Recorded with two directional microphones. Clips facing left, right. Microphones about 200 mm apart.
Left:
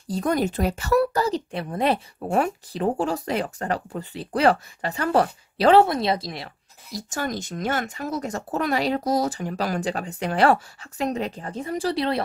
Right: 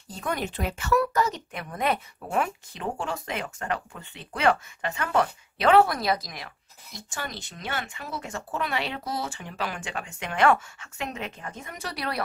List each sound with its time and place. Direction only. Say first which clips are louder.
0.1 s a woman's voice: left 8 dB; 40° left (ahead or behind)